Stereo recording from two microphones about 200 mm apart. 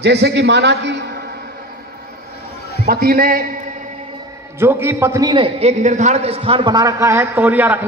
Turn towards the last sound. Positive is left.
turn(degrees=-10)  # may be behind; listen again after turning